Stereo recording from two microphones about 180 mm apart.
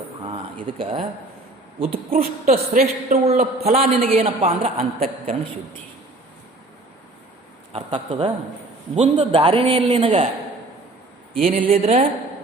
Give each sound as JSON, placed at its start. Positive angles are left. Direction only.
{"t": 0.8, "sound": "a man's voice", "side_deg": -30}
{"t": 4.8, "sound": "a man's voice", "side_deg": -50}
{"t": 7.7, "sound": "a man's voice", "side_deg": -30}
{"t": 11.5, "sound": "a man's voice", "side_deg": -35}